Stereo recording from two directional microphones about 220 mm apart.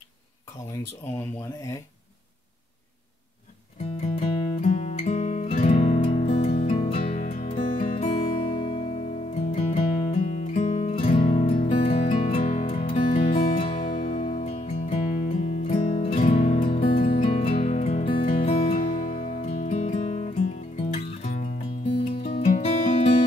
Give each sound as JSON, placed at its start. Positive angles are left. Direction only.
{"t": 1.1, "sound": "speech", "side_deg": 15}
{"t": 4.1, "sound": "music", "side_deg": 25}
{"t": 13.9, "sound": "music", "side_deg": 40}
{"t": 14.3, "sound": "music", "side_deg": 30}